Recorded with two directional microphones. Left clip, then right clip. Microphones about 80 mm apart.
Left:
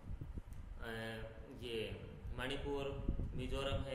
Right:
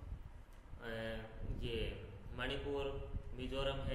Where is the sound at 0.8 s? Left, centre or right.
Left.